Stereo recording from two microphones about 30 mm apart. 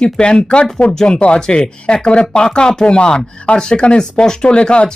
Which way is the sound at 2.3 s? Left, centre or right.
Left.